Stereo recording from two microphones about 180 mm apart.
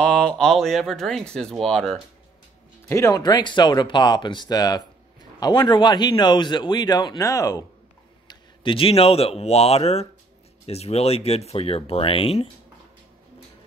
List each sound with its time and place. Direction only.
0.0 s speech: 5° left (ahead or behind)
2.9 s a man's voice: 20° left (ahead or behind)
8.3 s speech: 30° left (ahead or behind)